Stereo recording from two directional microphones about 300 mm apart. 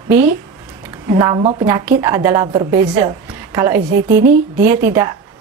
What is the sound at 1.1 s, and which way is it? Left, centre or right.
Speech, centre.